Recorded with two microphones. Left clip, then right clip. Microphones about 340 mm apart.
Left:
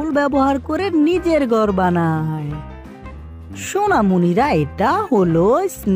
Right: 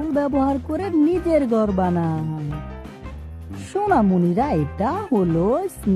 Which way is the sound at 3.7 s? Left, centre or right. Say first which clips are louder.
Left 3 dB; left.